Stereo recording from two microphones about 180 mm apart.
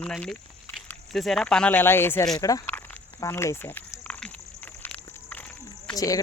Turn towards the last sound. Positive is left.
turn(degrees=20)  # may be behind; listen again after turning